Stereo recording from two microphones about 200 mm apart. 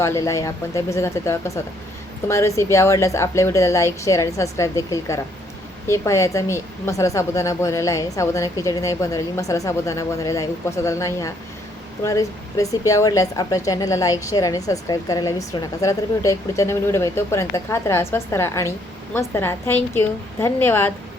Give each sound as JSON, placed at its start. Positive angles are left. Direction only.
{"t": 0.0, "sound": "speech", "side_deg": 15}